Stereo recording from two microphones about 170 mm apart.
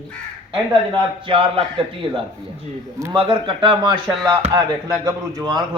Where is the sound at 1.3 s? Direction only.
30° right (ahead or behind).